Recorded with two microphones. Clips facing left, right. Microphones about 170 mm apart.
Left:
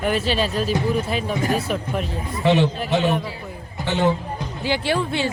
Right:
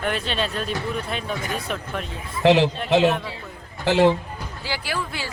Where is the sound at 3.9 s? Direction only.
90° right.